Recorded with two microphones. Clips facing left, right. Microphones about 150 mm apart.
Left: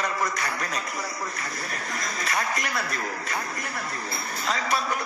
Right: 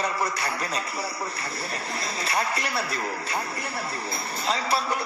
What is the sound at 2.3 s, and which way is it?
Speech, 30° right (ahead or behind).